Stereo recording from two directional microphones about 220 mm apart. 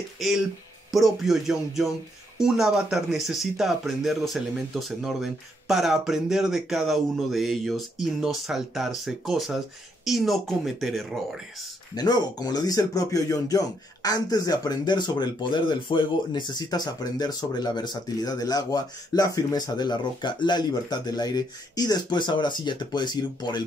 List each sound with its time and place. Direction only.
0.9 s speech: centre (ahead or behind)
11.9 s speech: 20° left (ahead or behind)